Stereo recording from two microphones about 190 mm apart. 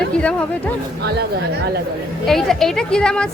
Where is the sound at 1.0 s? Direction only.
55° right (ahead or behind).